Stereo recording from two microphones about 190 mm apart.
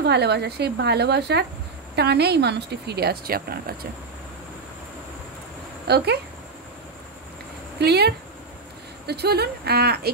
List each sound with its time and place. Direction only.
0.0 s speech: 60° right (ahead or behind)
5.9 s speech: 60° right (ahead or behind)
7.8 s speech: 60° right (ahead or behind)